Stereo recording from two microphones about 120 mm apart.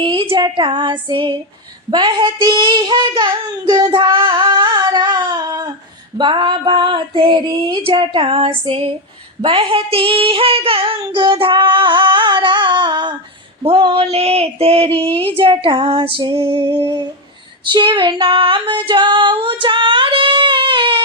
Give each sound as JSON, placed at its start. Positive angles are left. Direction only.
{"t": 0.0, "sound": "female singing", "side_deg": -45}
{"t": 1.9, "sound": "speech", "side_deg": -40}
{"t": 3.9, "sound": "a sound", "side_deg": -40}
{"t": 6.1, "sound": "female singing", "side_deg": -40}
{"t": 13.7, "sound": "speech", "side_deg": -55}
{"t": 15.4, "sound": "female singing", "side_deg": -50}
{"t": 16.6, "sound": "humming", "side_deg": -25}
{"t": 17.7, "sound": "female singing", "side_deg": -40}